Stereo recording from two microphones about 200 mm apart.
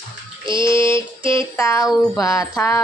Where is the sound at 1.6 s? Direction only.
15° left (ahead or behind).